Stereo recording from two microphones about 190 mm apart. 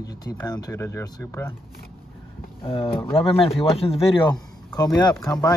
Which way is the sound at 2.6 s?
30° left (ahead or behind).